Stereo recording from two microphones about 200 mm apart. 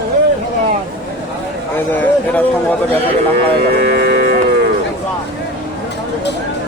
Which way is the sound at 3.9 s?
55° right (ahead or behind).